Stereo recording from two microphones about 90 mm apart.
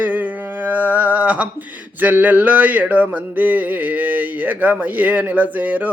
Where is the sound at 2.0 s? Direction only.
15° right (ahead or behind).